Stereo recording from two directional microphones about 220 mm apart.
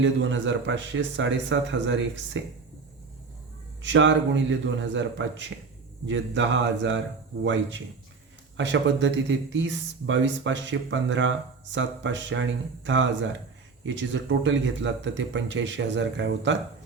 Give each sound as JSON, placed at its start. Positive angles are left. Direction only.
{"t": 0.0, "sound": "speech", "side_deg": -55}
{"t": 3.8, "sound": "speech", "side_deg": -55}